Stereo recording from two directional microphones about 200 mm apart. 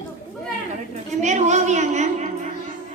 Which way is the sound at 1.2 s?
35° right (ahead or behind).